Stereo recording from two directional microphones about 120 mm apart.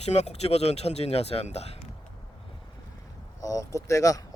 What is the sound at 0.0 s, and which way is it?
Speech, 65° left (ahead or behind).